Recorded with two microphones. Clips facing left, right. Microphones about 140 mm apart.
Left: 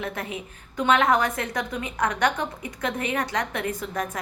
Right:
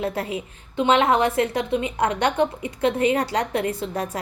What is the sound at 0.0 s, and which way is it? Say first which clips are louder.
A woman's voice: right 5 dB; 30° right (ahead or behind).